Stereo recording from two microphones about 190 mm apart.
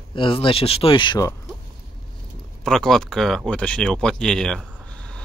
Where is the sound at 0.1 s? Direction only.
25° left (ahead or behind).